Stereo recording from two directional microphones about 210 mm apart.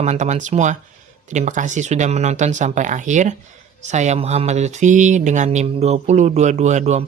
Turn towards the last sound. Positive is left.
turn(degrees=-35)  # may be behind; listen again after turning